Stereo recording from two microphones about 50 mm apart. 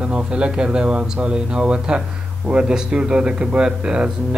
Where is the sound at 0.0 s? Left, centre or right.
Centre.